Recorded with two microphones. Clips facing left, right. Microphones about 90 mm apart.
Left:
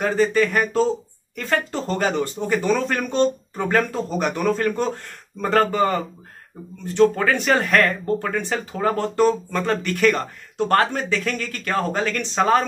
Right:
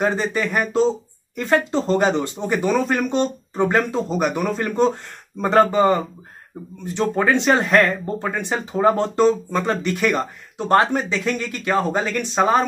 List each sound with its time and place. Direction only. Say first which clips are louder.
0.0 s speech: left 2 dB; 15° right (ahead or behind)